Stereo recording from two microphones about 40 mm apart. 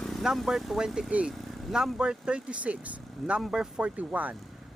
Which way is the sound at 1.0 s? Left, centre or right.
Right.